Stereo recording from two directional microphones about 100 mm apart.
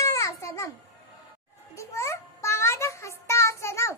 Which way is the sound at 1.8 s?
30° left (ahead or behind).